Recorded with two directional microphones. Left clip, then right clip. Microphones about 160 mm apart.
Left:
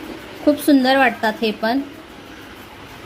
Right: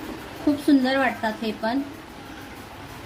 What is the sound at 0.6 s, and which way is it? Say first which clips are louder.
A woman's voice: left 6 dB; 70° left (ahead or behind).